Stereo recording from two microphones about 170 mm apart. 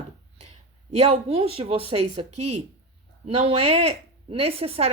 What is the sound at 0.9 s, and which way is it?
Speech, 35° right (ahead or behind).